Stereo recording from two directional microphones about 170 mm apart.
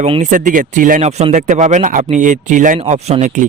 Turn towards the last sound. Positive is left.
turn(degrees=-45)  # may be behind; listen again after turning